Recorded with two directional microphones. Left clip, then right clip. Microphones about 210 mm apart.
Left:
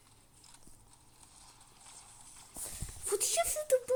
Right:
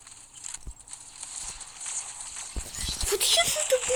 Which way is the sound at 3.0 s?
10° right (ahead or behind).